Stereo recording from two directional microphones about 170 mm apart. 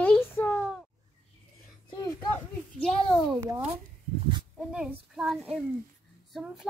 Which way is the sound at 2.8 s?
Centre (ahead or behind).